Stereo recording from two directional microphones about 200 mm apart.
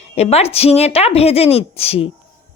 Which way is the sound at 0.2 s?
30° left (ahead or behind).